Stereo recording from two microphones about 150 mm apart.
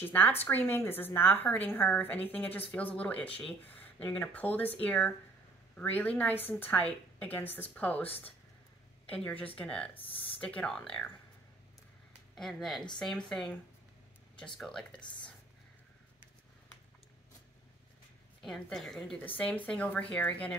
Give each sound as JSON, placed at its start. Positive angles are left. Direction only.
{"t": 0.0, "sound": "a woman's voice", "side_deg": 15}
{"t": 9.1, "sound": "a woman's voice", "side_deg": 10}
{"t": 10.0, "sound": "speech", "side_deg": 40}
{"t": 10.4, "sound": "a woman's voice", "side_deg": 5}
{"t": 12.4, "sound": "a woman's voice", "side_deg": 0}
{"t": 18.4, "sound": "a woman's voice", "side_deg": 5}